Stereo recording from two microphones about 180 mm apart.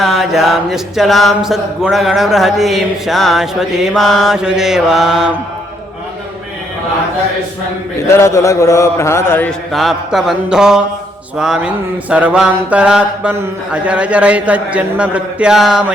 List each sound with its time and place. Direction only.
0.0 s chant: centre (ahead or behind)
8.0 s a man's voice: 15° left (ahead or behind); by 10.8 s 5° right (ahead or behind)
11.3 s mantra: 5° right (ahead or behind)